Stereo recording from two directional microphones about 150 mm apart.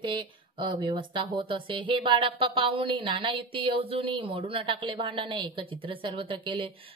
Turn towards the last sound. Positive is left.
turn(degrees=-35)  # may be behind; listen again after turning